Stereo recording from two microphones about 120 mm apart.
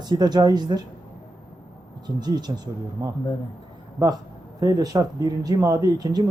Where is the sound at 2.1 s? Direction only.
35° right (ahead or behind).